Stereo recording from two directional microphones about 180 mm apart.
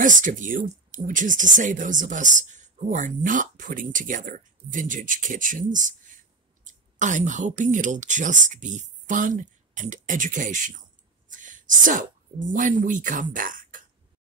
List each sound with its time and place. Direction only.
0.0 s speech: 45° right (ahead or behind)
11.2 s a sound: 45° right (ahead or behind)
12.4 s speech: 45° right (ahead or behind)